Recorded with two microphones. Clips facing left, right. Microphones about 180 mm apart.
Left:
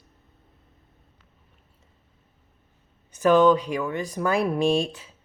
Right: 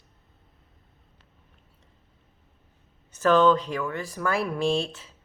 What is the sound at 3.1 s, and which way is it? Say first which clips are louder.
Speech: left 2 dB; 15° left (ahead or behind).